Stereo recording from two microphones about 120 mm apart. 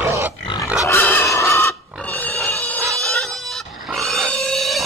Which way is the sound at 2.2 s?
15° left (ahead or behind).